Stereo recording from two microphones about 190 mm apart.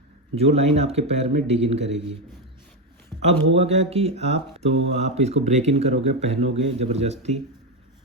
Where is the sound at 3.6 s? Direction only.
35° right (ahead or behind).